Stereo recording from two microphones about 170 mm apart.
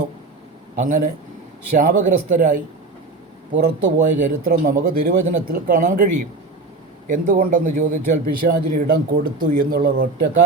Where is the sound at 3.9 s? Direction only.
45° right (ahead or behind).